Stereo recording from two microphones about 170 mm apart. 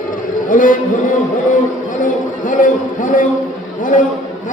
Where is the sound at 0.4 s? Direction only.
50° left (ahead or behind).